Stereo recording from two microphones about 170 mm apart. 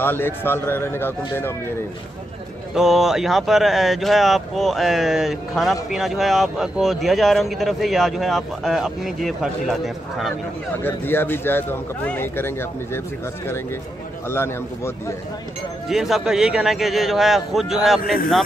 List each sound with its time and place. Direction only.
0.0 s speech: 10° left (ahead or behind)
2.7 s speech: centre (ahead or behind)
10.8 s speech: 15° left (ahead or behind)
15.9 s speech: centre (ahead or behind)